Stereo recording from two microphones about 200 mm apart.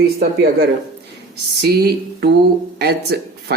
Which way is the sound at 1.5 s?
55° right (ahead or behind).